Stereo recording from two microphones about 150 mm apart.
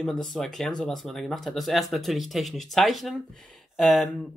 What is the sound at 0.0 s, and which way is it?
Speech, 5° left (ahead or behind).